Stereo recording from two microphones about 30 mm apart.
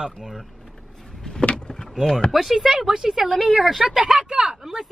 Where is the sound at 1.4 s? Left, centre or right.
Left.